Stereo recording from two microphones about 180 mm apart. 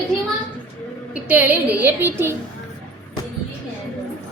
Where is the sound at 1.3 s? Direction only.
10° right (ahead or behind).